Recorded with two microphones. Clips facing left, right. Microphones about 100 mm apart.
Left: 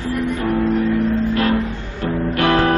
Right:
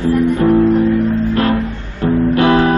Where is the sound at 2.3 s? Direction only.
20° right (ahead or behind).